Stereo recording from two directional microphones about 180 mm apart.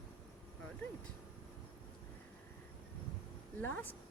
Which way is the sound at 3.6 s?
10° left (ahead or behind).